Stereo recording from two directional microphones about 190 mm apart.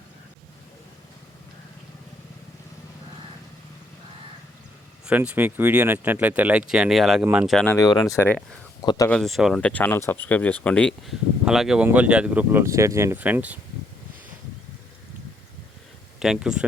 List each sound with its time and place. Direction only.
5.0 s speech: 5° right (ahead or behind)
7.5 s speech: 5° left (ahead or behind)
7.8 s speech: 20° left (ahead or behind)
9.0 s speech: centre (ahead or behind)
16.2 s speech: 5° right (ahead or behind)